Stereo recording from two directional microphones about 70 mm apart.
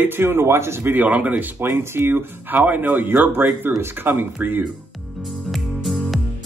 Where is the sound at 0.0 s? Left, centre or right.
Right.